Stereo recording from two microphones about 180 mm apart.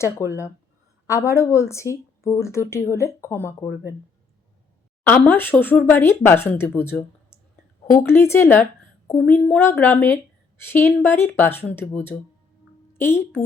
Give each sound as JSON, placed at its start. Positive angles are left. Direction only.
{"t": 0.3, "sound": "speech", "side_deg": 15}
{"t": 5.0, "sound": "speech", "side_deg": 10}